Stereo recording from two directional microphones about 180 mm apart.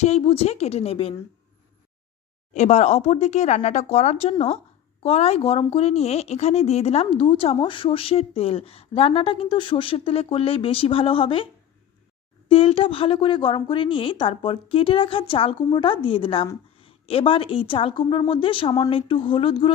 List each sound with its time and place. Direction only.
0.0 s speech: 35° left (ahead or behind)
2.5 s speech: 40° left (ahead or behind)
12.5 s a woman's voice: 30° left (ahead or behind)